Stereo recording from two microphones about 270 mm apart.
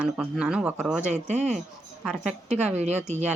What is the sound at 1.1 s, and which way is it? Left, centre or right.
Speech, right.